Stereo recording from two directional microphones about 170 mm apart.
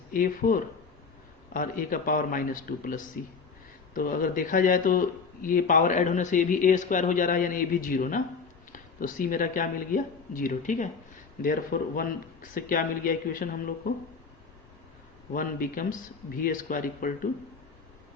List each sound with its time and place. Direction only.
0.1 s speech: 55° left (ahead or behind)
15.3 s speech: 55° left (ahead or behind)